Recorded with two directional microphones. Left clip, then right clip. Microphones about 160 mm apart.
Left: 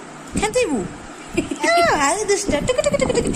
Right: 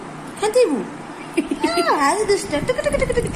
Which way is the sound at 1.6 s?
90° left.